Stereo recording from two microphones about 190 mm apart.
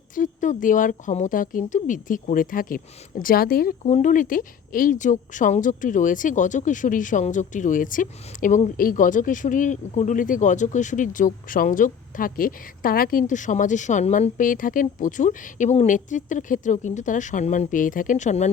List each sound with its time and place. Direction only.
0.1 s a woman's voice: 45° left (ahead or behind)